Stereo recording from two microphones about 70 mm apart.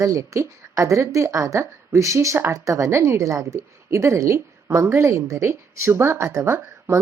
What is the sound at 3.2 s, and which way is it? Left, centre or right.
A woman's voice, right.